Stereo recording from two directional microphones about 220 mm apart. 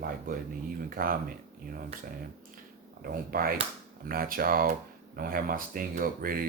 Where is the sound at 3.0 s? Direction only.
40° right (ahead or behind).